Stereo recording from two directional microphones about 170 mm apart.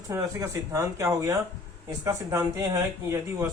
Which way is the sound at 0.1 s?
20° right (ahead or behind).